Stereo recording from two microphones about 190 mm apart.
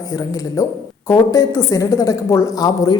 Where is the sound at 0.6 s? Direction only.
15° left (ahead or behind).